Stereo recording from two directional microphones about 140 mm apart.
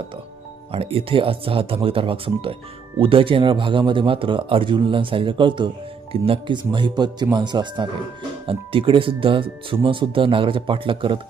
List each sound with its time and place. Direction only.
0.7 s speech: 45° right (ahead or behind)